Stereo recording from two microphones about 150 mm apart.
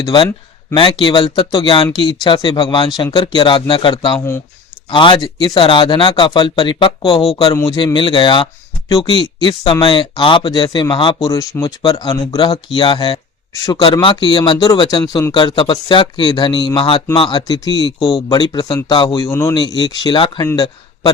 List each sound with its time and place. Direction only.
0.0 s speech: 30° left (ahead or behind)
7.5 s speech: 20° left (ahead or behind)
7.9 s speech: 35° left (ahead or behind)
11.2 s speech: 20° left (ahead or behind)
19.6 s speech: 30° left (ahead or behind)